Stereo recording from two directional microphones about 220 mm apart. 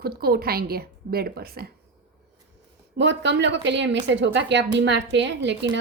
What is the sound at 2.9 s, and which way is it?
Speech, 50° right (ahead or behind).